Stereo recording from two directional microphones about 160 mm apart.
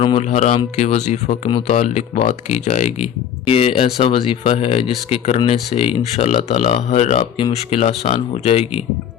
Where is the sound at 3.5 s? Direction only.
35° left (ahead or behind).